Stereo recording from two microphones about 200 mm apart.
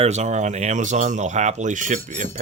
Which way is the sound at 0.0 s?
35° right (ahead or behind).